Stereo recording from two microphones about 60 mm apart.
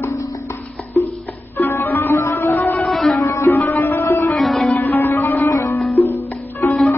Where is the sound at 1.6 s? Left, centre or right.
Left.